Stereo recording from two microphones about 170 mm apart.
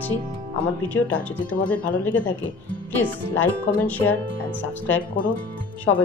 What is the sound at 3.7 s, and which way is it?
Speech, 10° left (ahead or behind).